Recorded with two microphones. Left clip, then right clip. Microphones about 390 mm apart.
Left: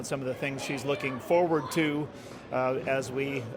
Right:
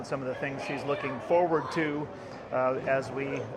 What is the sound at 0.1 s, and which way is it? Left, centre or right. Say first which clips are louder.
Speech: even; left.